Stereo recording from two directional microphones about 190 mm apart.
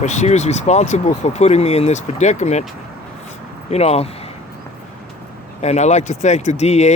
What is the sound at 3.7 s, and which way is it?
Speech, 35° left (ahead or behind).